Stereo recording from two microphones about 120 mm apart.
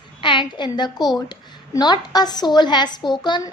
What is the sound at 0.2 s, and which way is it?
A woman's voice, 40° left (ahead or behind).